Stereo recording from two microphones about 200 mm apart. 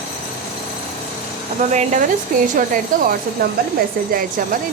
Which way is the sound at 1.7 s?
35° right (ahead or behind).